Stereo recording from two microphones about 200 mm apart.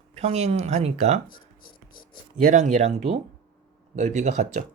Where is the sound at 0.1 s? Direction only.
30° right (ahead or behind).